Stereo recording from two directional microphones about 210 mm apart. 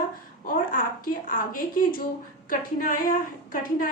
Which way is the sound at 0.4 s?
40° left (ahead or behind).